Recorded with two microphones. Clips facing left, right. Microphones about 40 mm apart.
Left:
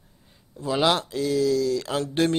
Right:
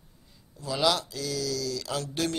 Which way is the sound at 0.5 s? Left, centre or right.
Left.